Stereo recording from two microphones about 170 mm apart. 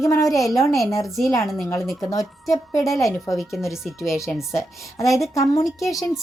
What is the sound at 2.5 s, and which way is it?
Speech, 20° left (ahead or behind).